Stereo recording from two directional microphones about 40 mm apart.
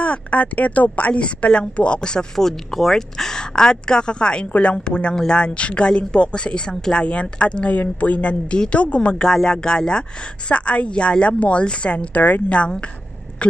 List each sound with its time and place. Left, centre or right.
0.0 s a woman's voice: left
2.3 s a woman's voice: centre; by 12.2 s left
12.2 s speech: left
13.4 s speech: left